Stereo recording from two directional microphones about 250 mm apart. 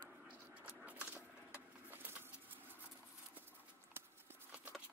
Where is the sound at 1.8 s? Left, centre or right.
Centre.